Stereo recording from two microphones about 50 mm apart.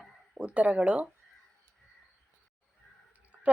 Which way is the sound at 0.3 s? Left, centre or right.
Right.